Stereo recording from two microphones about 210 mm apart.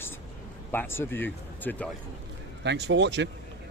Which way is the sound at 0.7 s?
10° left (ahead or behind).